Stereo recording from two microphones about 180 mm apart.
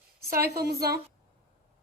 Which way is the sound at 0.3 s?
55° right (ahead or behind).